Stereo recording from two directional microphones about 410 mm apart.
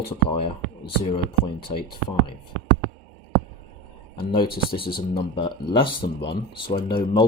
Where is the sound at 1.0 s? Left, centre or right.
Centre.